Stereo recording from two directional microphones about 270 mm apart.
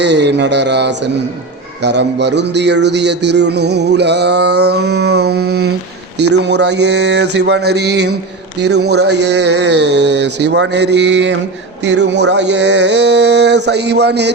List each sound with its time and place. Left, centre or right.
0.0 s speech: right